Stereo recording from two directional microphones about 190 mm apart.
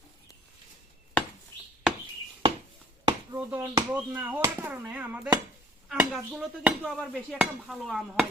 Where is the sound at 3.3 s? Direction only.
10° right (ahead or behind).